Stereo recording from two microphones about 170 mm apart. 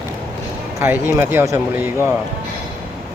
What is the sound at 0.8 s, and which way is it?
Speech, 15° right (ahead or behind).